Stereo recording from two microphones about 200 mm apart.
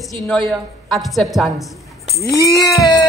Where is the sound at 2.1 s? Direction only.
15° left (ahead or behind).